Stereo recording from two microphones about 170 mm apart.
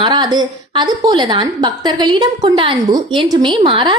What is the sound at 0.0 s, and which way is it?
A woman's voice, 25° right (ahead or behind).